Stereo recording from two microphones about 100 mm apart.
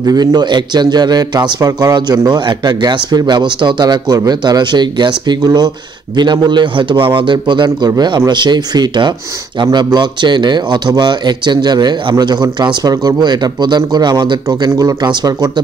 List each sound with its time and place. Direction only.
0.0 s a man's voice: 40° right (ahead or behind)